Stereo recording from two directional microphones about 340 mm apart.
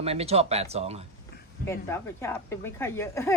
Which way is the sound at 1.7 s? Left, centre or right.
Centre.